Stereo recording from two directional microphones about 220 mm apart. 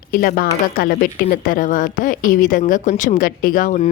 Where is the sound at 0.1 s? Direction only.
45° left (ahead or behind).